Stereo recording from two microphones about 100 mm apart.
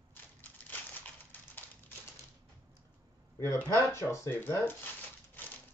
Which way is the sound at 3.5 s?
25° left (ahead or behind).